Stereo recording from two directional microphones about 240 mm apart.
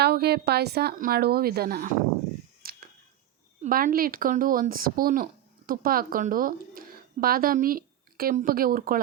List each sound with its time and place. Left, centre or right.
0.0 s a woman's voice: right
2.6 s a sound: right
3.6 s speech: right